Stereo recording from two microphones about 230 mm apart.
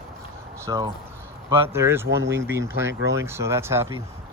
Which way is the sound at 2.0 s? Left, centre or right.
Right.